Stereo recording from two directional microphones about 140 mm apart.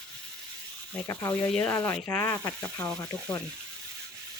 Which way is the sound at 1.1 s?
20° left (ahead or behind).